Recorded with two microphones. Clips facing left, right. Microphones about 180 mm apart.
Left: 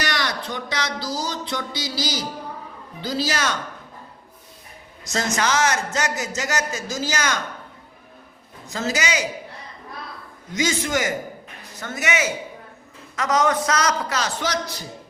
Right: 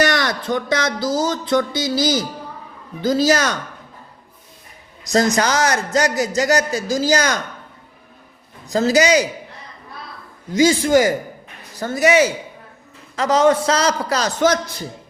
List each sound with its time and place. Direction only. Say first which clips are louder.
0.0 s a sound: right 8 dB; 50° right (ahead or behind)
3.0 s speech: right 8 dB; 45° right (ahead or behind)
5.1 s a man's voice: right 6 dB; 35° right (ahead or behind)
8.6 s a man's voice: right 10 dB; 35° right (ahead or behind)
10.5 s a man's voice: right 9 dB; 35° right (ahead or behind); by 14.8 s 50° right (ahead or behind)